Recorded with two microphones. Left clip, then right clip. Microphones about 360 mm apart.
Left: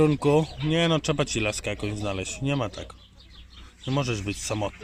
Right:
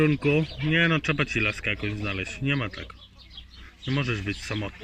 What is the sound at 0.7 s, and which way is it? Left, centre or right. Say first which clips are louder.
Speech: right 1 dB; centre.